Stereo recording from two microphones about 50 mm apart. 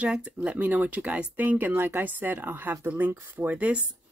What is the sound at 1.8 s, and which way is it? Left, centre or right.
Speech, right.